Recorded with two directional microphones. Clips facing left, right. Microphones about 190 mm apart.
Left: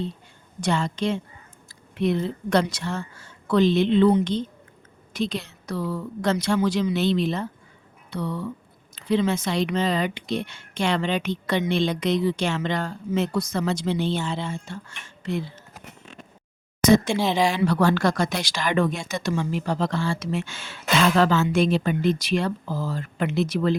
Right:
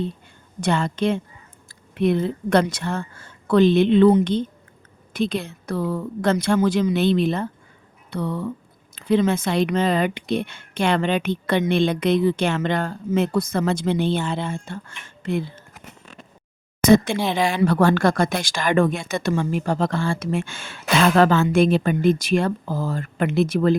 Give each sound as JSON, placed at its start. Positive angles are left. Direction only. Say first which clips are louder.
{"t": 0.6, "sound": "speech", "louder": "right 3 dB", "side_deg": -55}
{"t": 16.8, "sound": "speech", "louder": "right 2 dB", "side_deg": -55}